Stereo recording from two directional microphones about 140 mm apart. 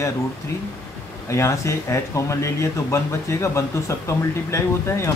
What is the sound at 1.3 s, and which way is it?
Speech, 20° left (ahead or behind).